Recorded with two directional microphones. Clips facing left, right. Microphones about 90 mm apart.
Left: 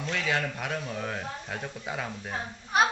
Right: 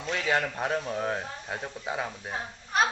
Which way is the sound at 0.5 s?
30° right (ahead or behind).